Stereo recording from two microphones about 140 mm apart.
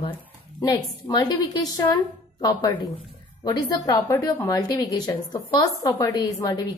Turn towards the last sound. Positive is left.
turn(degrees=30)  # may be behind; listen again after turning